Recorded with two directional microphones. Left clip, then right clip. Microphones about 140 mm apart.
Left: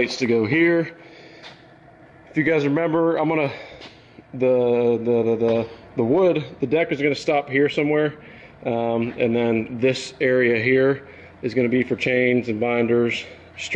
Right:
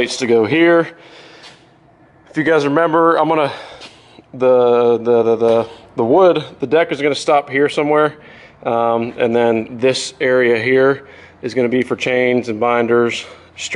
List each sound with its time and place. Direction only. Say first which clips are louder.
0.0 s speech: right 6 dB; 20° right (ahead or behind)
2.3 s speech: right 6 dB; 20° right (ahead or behind)